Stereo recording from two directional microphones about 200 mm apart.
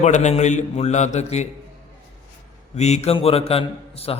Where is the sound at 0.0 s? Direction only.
35° left (ahead or behind).